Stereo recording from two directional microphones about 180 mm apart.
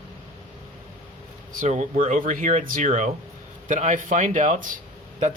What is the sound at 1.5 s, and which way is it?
Speech, 45° right (ahead or behind).